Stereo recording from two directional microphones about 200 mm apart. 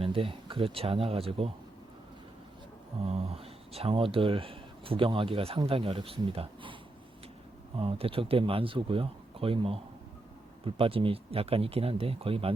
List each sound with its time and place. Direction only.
0.0 s speech: 25° right (ahead or behind)
3.0 s speech: 30° right (ahead or behind)
7.8 s speech: 30° right (ahead or behind)